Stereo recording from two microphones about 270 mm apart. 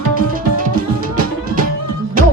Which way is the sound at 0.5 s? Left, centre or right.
Right.